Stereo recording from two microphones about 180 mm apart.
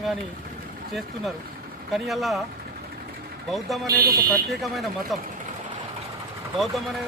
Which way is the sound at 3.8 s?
55° right (ahead or behind).